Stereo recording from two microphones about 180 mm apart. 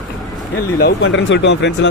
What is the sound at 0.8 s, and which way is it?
Speech, 75° left (ahead or behind).